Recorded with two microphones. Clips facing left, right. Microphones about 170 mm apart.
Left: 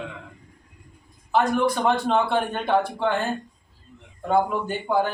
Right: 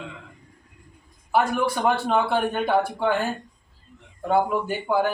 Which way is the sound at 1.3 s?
10° right (ahead or behind).